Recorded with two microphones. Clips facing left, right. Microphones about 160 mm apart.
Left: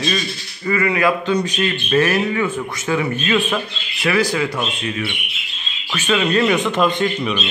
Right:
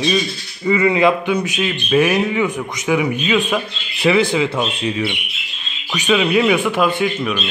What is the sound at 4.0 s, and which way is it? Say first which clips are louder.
A man's voice: right 3 dB; 25° right (ahead or behind).